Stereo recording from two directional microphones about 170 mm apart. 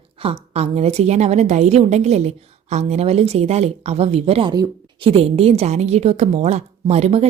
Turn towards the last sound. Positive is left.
turn(degrees=-40)  # may be behind; listen again after turning